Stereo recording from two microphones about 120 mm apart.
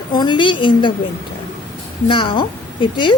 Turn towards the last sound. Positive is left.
turn(degrees=40)  # may be behind; listen again after turning